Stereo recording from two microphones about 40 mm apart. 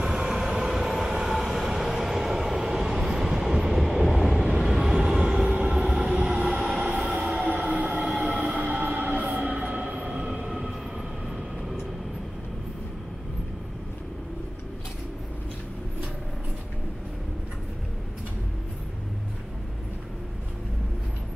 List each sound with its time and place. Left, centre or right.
0.0 s train: centre
7.1 s train: centre
7.3 s train: right
8.1 s train: centre
8.6 s train: right
10.0 s train: right
11.2 s vehicle: centre